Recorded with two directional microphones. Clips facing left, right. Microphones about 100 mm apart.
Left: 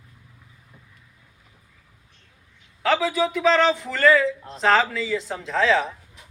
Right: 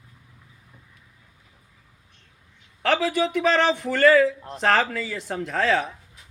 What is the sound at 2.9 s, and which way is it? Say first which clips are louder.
Speech: even; 55° right (ahead or behind).